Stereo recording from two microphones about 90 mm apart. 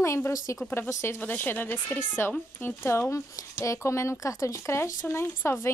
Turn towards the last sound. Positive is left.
turn(degrees=30)  # may be behind; listen again after turning